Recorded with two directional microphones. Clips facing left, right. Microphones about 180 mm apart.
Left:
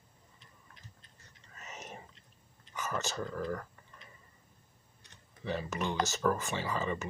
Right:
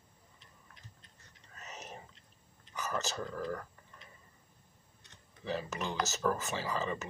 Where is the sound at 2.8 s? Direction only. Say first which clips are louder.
Even; 40° right (ahead or behind).